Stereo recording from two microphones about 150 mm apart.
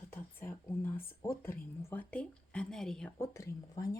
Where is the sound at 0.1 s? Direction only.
15° left (ahead or behind).